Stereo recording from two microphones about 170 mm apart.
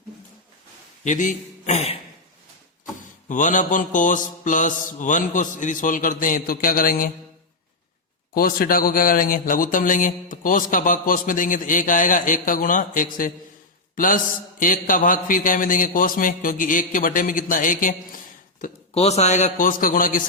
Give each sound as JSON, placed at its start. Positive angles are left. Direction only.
{"t": 1.0, "sound": "a man's voice", "side_deg": 50}
{"t": 3.2, "sound": "a man's voice", "side_deg": 50}
{"t": 8.3, "sound": "a man's voice", "side_deg": 60}
{"t": 18.9, "sound": "a man's voice", "side_deg": 40}